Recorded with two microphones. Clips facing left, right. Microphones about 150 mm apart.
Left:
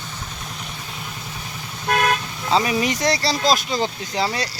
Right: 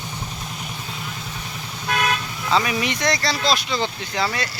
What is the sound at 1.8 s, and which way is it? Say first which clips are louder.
Speech: left 3 dB; 45° left (ahead or behind).